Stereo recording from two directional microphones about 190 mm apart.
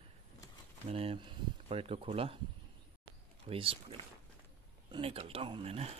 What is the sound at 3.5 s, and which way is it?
Speech, 30° right (ahead or behind).